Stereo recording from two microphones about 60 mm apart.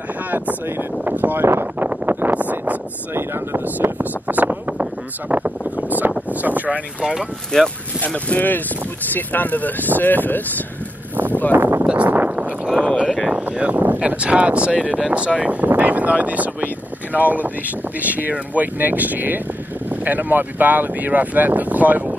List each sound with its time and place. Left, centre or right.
0.3 s speech: right
1.5 s speech: right
1.9 s a sound: right
3.2 s speech: right
4.0 s a sound: right
5.3 s speech: right
5.9 s a sound: right
6.2 s speech: right
7.5 s speech: centre
8.4 s speech: left
11.5 s speech: right
11.8 s a sound: right
13.3 s speech: right